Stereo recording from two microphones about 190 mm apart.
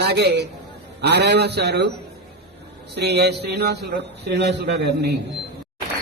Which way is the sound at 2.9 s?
60° right (ahead or behind).